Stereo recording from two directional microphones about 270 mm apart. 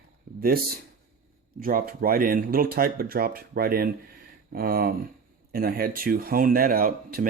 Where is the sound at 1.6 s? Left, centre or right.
Right.